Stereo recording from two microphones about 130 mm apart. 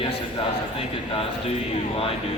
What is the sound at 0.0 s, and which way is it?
A man's voice, 45° left (ahead or behind).